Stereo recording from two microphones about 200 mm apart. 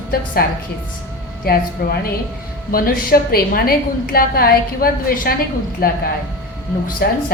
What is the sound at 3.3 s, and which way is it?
A woman's voice, 50° left (ahead or behind).